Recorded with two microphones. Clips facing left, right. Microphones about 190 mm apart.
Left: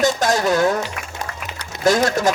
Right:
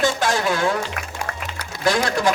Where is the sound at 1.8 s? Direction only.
45° left (ahead or behind).